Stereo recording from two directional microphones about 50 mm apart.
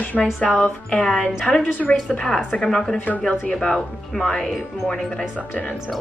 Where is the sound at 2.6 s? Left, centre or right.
Centre.